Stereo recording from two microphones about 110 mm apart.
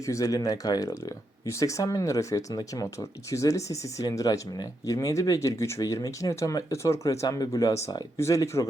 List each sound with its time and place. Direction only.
0.0 s speech: 30° left (ahead or behind)